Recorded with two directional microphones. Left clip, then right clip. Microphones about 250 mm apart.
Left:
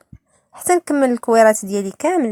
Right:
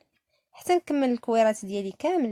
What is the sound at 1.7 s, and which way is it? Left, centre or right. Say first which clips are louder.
Speech: left 8 dB; centre.